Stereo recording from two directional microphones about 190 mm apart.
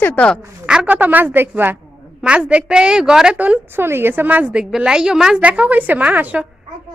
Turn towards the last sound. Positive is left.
turn(degrees=-10)  # may be behind; listen again after turning